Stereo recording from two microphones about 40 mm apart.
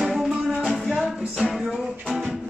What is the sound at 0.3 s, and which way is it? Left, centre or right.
Music, right.